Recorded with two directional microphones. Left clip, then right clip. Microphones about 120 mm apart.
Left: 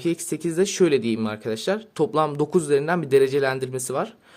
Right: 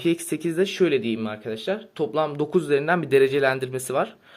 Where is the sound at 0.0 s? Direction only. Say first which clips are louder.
Right 1 dB; 25° left (ahead or behind).